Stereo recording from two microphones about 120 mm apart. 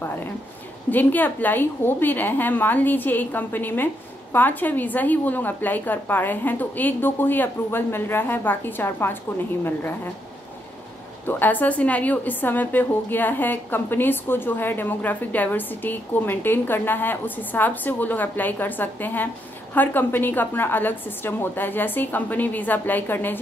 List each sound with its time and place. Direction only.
0.8 s a woman's voice: 15° left (ahead or behind)
11.2 s a woman's voice: 15° left (ahead or behind)